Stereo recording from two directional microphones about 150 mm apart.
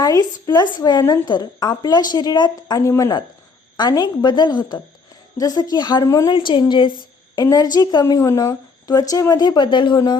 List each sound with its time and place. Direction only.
0.0 s a woman's voice: 25° left (ahead or behind)
6.3 s a woman's voice: 30° left (ahead or behind)